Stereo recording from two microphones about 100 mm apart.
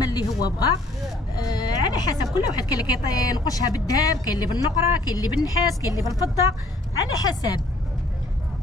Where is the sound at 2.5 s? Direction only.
40° left (ahead or behind).